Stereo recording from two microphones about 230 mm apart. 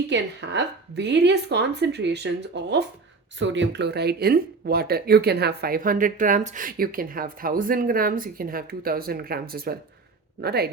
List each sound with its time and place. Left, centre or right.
0.1 s speech: right